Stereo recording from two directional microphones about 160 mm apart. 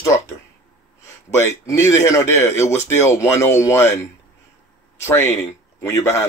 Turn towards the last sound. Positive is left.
turn(degrees=20)  # may be behind; listen again after turning